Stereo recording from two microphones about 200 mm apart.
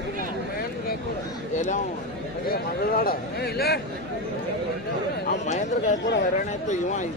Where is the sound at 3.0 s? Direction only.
50° left (ahead or behind).